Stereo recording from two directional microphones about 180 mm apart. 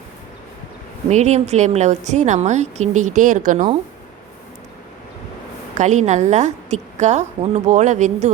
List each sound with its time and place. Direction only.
1.1 s a woman's voice: 40° right (ahead or behind)
5.7 s a woman's voice: 40° right (ahead or behind)